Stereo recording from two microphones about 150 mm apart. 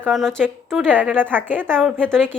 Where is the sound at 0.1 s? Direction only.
Centre (ahead or behind).